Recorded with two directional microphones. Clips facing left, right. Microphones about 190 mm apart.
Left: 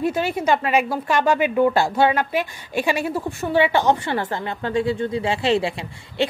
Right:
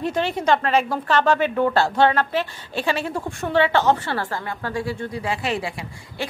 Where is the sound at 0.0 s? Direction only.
10° left (ahead or behind).